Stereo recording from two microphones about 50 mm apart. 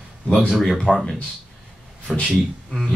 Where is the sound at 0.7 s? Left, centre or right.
Centre.